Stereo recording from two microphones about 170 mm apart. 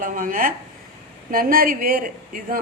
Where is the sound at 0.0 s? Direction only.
55° right (ahead or behind).